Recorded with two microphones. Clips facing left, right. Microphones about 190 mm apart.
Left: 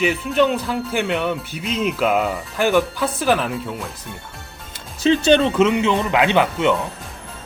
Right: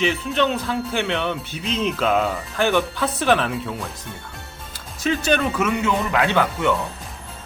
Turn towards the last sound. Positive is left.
turn(degrees=20)  # may be behind; listen again after turning